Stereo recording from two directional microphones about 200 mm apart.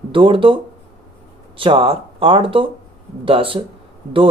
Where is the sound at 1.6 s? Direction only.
25° right (ahead or behind).